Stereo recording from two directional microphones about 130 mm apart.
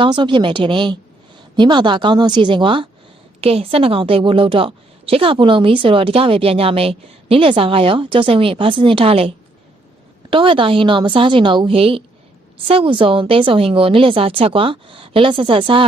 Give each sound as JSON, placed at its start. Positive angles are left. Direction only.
{"t": 0.0, "sound": "a woman's voice", "side_deg": -40}
{"t": 10.3, "sound": "a woman's voice", "side_deg": -40}